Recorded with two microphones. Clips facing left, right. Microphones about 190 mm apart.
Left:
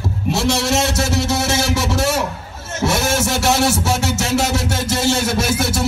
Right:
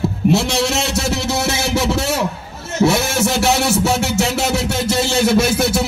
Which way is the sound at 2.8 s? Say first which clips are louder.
Right 3 dB; 60° right (ahead or behind).